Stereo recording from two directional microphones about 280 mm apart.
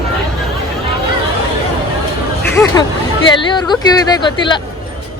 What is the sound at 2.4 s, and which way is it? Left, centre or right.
Speech, centre.